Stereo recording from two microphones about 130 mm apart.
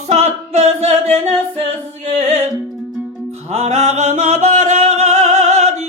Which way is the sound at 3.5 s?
55° right (ahead or behind).